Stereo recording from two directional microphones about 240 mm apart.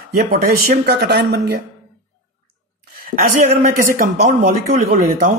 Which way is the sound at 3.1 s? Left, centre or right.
Right.